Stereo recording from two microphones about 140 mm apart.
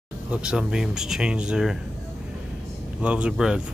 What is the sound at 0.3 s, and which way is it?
Speech, 5° right (ahead or behind).